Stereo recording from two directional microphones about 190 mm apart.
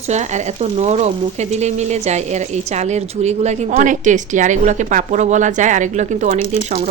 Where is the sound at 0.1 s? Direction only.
40° right (ahead or behind).